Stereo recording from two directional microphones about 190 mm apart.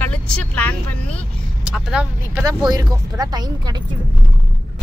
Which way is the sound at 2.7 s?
20° right (ahead or behind).